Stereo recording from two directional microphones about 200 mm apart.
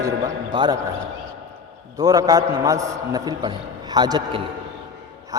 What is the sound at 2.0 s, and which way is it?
A man's voice, 20° right (ahead or behind).